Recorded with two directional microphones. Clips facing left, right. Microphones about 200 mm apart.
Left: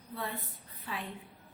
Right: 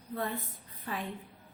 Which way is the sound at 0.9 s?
50° right (ahead or behind).